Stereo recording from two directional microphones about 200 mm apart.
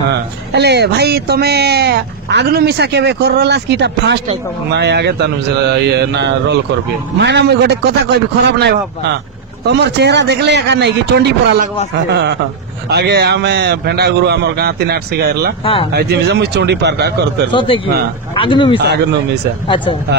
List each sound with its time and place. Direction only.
0.1 s speech: 55° right (ahead or behind)
15.6 s speech: 25° left (ahead or behind)
15.9 s speech: 55° right (ahead or behind)
17.5 s speech: 25° left (ahead or behind)